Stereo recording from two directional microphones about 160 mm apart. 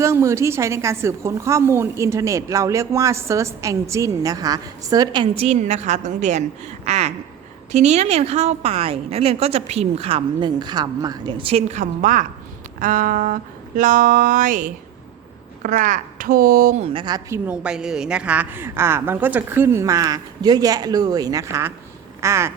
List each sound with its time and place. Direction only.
0.0 s a woman's voice: 20° right (ahead or behind); by 6.4 s 45° right (ahead or behind)
6.8 s a sound: 45° right (ahead or behind)
7.7 s a woman's voice: 45° right (ahead or behind)
12.8 s music: 55° right (ahead or behind)
16.8 s a woman's voice: 30° right (ahead or behind)
17.2 s a woman's voice: 15° right (ahead or behind)